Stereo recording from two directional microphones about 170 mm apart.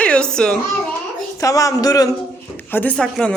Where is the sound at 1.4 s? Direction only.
20° left (ahead or behind).